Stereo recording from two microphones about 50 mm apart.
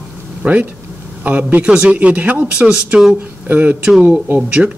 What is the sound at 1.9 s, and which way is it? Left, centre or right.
Speech, right.